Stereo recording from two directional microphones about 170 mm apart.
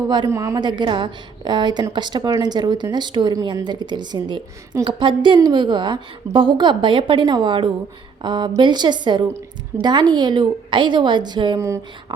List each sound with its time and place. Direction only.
0.1 s a woman's voice: 20° right (ahead or behind)